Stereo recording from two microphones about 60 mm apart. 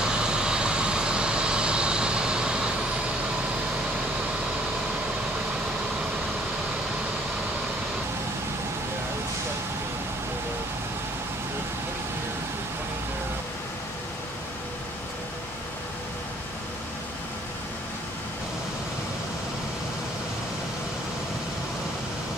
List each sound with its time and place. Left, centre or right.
0.0 s vehicle: centre